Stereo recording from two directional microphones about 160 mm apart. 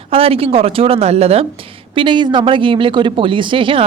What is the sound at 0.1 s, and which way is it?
Speech, 35° right (ahead or behind).